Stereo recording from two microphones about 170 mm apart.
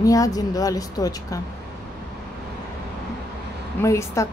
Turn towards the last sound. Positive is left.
turn(degrees=15)  # may be behind; listen again after turning